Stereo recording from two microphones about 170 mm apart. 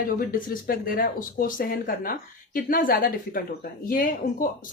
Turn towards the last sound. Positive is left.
turn(degrees=55)  # may be behind; listen again after turning